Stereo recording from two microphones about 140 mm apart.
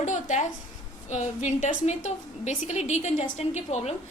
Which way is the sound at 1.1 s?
55° left (ahead or behind).